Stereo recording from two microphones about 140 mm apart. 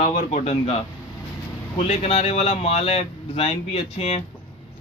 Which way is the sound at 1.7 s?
50° left (ahead or behind).